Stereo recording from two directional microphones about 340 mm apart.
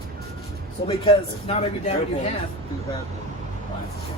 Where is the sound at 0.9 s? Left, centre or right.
Centre.